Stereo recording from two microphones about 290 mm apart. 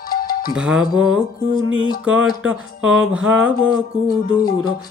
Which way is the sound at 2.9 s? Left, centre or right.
Centre.